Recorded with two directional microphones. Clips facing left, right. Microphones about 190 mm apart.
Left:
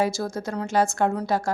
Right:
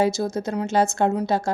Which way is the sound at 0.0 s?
20° right (ahead or behind).